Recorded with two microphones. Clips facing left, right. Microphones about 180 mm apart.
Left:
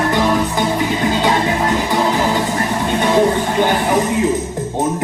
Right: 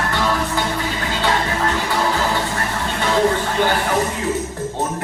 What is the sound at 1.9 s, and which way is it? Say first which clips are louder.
Music: left 4 dB; 20° left (ahead or behind).